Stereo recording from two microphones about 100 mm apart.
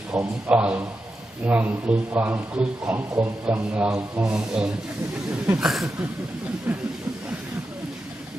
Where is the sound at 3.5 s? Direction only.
15° right (ahead or behind).